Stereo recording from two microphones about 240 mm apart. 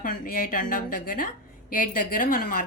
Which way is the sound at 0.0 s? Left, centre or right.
Left.